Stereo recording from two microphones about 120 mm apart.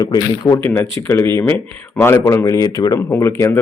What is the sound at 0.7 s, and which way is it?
Speech, 20° left (ahead or behind).